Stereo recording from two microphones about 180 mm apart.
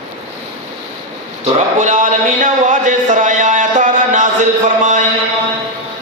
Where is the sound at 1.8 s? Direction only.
45° right (ahead or behind).